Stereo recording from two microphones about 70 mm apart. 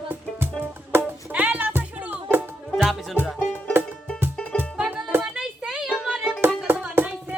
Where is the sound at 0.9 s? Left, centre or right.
Right.